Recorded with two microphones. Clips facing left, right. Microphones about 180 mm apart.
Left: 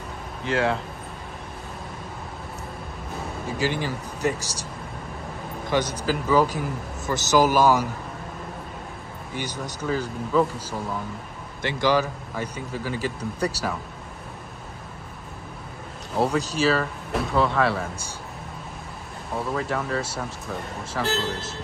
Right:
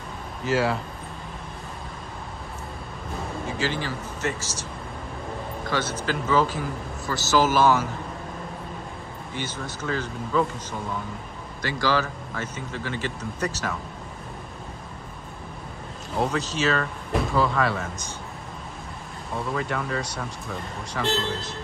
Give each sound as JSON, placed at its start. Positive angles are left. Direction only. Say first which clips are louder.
{"t": 3.6, "sound": "speech", "louder": "left 4 dB", "side_deg": 15}
{"t": 5.7, "sound": "speech", "louder": "left 3 dB", "side_deg": 15}
{"t": 9.3, "sound": "speech", "louder": "left 1 dB", "side_deg": 10}
{"t": 11.6, "sound": "speech", "louder": "left 3 dB", "side_deg": 15}
{"t": 16.2, "sound": "speech", "louder": "left 3 dB", "side_deg": 10}
{"t": 19.3, "sound": "speech", "louder": "left 1 dB", "side_deg": 0}